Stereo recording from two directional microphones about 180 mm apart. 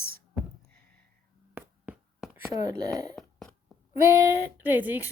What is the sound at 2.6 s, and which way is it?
Speech, 20° right (ahead or behind).